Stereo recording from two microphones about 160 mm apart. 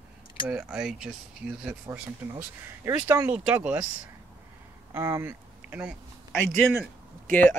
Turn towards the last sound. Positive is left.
turn(degrees=10)  # may be behind; listen again after turning